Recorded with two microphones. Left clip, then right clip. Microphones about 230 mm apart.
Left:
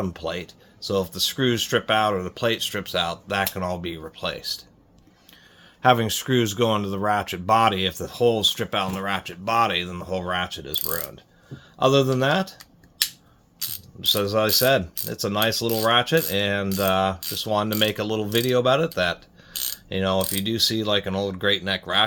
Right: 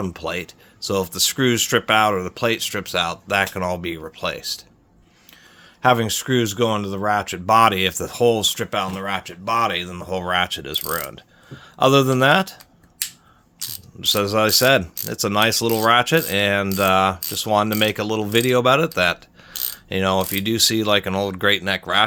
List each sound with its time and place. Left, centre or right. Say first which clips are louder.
0.0 s speech: right 3 dB; right
5.8 s speech: right 2 dB; centre
14.0 s speech: right 3 dB; right